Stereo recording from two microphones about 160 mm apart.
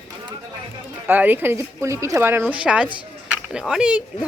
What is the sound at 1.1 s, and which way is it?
Speech, 10° right (ahead or behind).